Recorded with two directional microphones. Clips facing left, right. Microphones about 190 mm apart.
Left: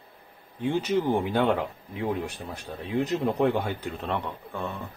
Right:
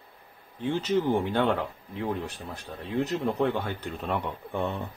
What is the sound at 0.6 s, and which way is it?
Speech, 15° left (ahead or behind).